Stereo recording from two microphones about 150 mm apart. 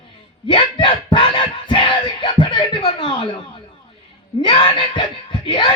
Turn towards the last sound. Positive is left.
turn(degrees=35)  # may be behind; listen again after turning